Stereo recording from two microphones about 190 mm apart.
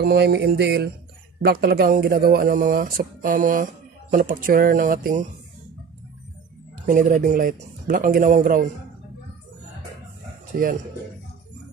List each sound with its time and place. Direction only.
0.0 s music: 60° right (ahead or behind)
1.4 s speech: 55° right (ahead or behind)
6.9 s speech: 45° right (ahead or behind)
10.5 s speech: 45° right (ahead or behind)